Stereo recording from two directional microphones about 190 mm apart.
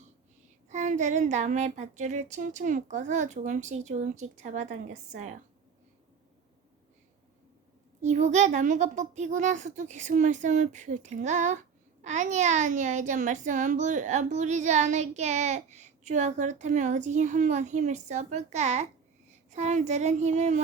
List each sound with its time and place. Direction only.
0.7 s a child's voice: 40° right (ahead or behind)
8.0 s a child's voice: 40° right (ahead or behind)